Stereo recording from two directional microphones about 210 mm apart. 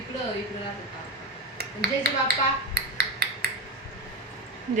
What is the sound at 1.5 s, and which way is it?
Speech, 50° right (ahead or behind).